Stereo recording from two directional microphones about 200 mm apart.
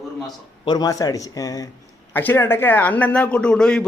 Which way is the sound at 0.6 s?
20° left (ahead or behind).